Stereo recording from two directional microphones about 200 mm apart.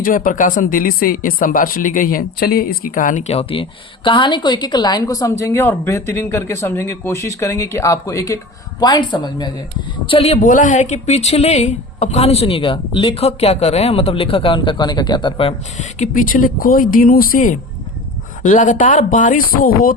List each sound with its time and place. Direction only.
0.0 s a woman's voice: 45° left (ahead or behind)